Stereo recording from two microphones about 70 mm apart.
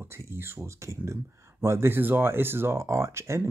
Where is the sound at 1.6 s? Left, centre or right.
Right.